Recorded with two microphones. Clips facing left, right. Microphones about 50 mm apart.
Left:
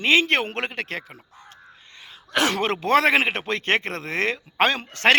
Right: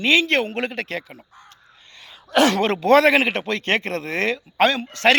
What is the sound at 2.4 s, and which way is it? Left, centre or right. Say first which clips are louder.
Speech: right 4 dB; left.